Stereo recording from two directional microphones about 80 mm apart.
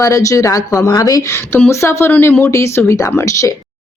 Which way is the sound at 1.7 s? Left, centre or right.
Left.